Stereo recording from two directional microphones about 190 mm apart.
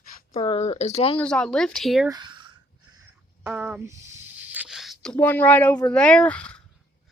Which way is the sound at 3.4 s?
10° right (ahead or behind).